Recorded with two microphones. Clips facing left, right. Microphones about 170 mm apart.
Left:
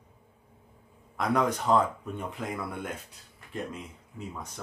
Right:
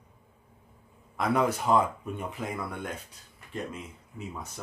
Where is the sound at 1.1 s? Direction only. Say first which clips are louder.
Right 1 dB; 5° right (ahead or behind).